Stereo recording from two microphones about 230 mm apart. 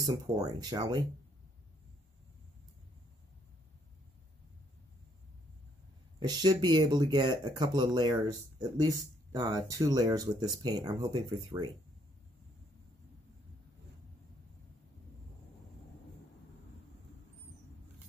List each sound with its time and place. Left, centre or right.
0.0 s speech: centre
6.1 s speech: centre